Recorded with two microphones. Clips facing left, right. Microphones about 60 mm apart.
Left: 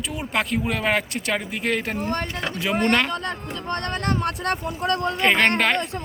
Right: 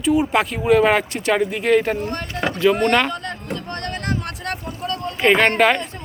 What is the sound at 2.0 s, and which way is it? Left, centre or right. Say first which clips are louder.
Speech: left 1 dB; left.